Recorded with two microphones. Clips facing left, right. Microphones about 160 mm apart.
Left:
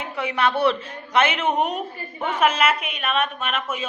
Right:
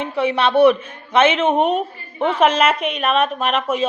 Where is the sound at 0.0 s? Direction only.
25° right (ahead or behind).